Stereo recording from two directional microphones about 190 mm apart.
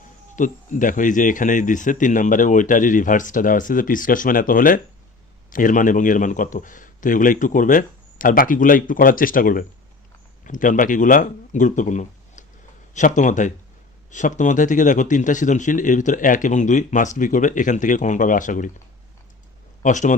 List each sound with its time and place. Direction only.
0.3 s speech: 45° left (ahead or behind)
19.8 s speech: 40° left (ahead or behind)